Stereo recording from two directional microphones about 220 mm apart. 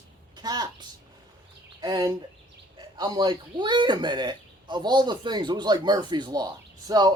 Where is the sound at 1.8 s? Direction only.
20° right (ahead or behind).